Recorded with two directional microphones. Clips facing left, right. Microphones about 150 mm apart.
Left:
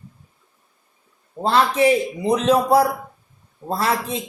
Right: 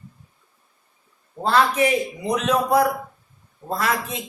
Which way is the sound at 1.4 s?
30° left (ahead or behind).